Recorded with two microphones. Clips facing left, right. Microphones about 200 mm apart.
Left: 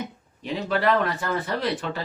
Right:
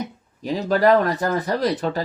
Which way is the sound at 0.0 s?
40° right (ahead or behind).